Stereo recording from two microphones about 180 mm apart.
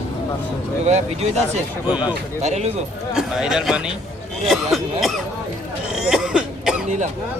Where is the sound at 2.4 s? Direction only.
40° right (ahead or behind).